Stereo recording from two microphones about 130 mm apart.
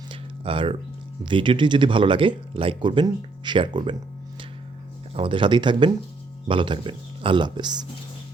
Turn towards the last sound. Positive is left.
turn(degrees=-35)  # may be behind; listen again after turning